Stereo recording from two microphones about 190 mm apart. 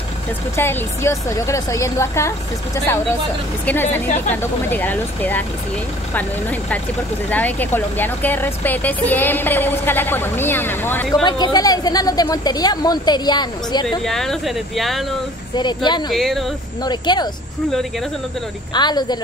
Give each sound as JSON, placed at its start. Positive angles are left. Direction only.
{"t": 0.6, "sound": "speech", "side_deg": 15}
{"t": 7.2, "sound": "speech", "side_deg": 10}
{"t": 11.2, "sound": "speech", "side_deg": 25}
{"t": 13.8, "sound": "speech", "side_deg": 0}
{"t": 15.5, "sound": "speech", "side_deg": 25}
{"t": 16.1, "sound": "speech", "side_deg": 0}
{"t": 16.8, "sound": "speech", "side_deg": 25}
{"t": 18.7, "sound": "speech", "side_deg": 25}